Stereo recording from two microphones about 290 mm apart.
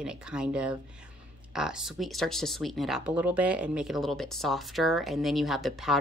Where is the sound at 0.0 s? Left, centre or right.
Centre.